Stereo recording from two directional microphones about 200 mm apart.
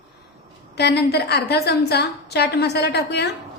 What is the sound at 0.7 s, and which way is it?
A woman's voice, 55° left (ahead or behind).